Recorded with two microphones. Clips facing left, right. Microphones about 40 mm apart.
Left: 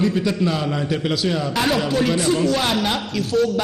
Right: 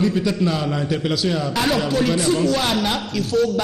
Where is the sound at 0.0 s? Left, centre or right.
Left.